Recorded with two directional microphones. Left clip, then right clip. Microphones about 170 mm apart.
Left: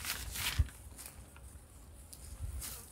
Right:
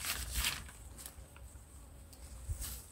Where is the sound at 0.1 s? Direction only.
10° left (ahead or behind).